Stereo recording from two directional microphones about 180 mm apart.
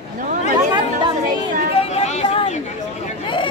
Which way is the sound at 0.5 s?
25° right (ahead or behind).